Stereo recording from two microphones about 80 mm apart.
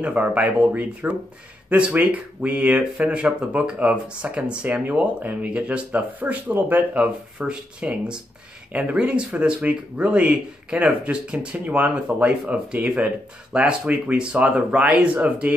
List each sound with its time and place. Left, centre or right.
0.0 s speech: centre